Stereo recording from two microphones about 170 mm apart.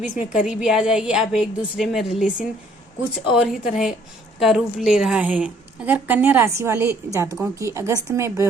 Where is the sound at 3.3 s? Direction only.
5° right (ahead or behind).